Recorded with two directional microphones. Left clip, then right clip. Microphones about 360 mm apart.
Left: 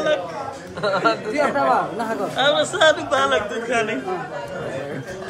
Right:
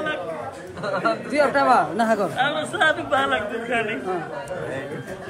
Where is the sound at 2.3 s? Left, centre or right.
Centre.